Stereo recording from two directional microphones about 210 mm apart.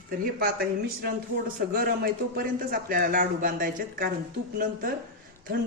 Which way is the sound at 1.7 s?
45° right (ahead or behind).